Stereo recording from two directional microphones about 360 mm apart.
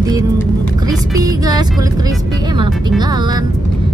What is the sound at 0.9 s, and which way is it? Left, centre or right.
Music, centre.